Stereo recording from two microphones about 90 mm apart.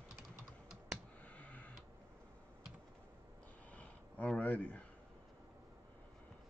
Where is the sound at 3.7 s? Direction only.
10° left (ahead or behind).